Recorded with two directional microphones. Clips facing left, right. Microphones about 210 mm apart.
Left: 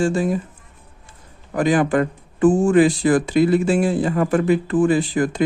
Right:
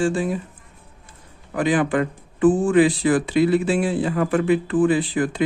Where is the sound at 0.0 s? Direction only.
40° left (ahead or behind).